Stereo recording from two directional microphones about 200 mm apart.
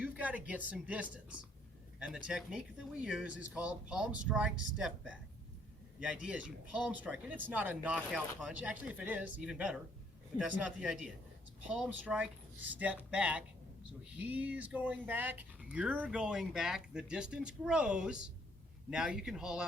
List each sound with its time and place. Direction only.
0.0 s speech: 5° right (ahead or behind)